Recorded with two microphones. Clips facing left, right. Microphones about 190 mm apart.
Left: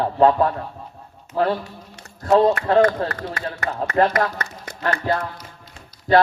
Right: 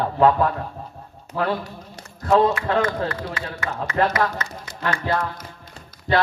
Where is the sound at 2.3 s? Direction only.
35° left (ahead or behind).